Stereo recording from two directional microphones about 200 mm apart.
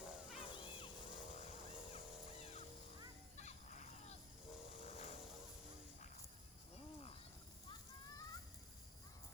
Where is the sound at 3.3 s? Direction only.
35° left (ahead or behind).